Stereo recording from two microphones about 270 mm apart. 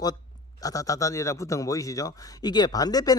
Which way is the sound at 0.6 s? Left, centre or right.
Centre.